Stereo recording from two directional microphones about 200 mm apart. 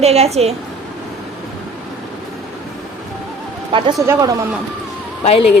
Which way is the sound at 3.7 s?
25° right (ahead or behind).